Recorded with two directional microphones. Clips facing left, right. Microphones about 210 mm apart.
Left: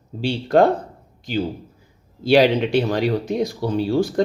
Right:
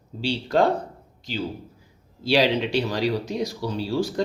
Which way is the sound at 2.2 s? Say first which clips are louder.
Left 5 dB; 50° left (ahead or behind).